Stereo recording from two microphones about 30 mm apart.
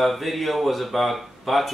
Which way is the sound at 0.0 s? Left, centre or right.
Centre.